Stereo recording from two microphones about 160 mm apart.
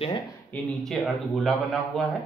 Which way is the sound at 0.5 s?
Centre (ahead or behind).